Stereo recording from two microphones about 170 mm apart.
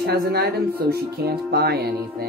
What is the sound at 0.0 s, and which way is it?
Speech, 65° right (ahead or behind).